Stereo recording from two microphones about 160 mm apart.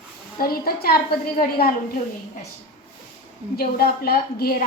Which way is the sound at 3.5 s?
75° left (ahead or behind).